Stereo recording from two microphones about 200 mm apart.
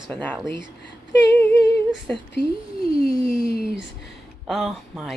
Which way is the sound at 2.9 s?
25° right (ahead or behind).